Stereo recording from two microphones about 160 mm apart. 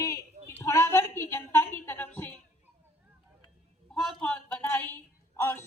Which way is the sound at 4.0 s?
Centre (ahead or behind).